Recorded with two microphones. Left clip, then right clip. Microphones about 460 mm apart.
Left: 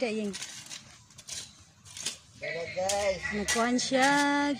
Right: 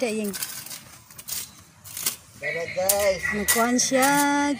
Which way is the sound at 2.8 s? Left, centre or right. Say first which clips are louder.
Right 7 dB; left.